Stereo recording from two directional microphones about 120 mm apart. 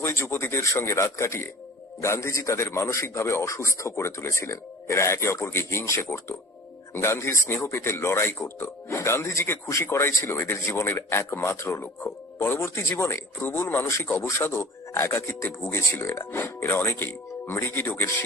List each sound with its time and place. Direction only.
0.0 s speech: 20° left (ahead or behind)